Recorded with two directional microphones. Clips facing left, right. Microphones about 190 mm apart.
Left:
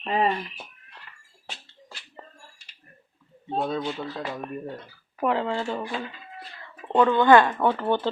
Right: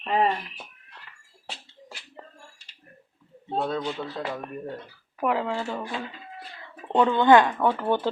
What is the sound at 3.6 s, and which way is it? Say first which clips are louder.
Speech: even; 10° left (ahead or behind).